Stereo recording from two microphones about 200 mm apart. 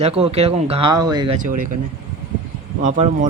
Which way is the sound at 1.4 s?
40° right (ahead or behind).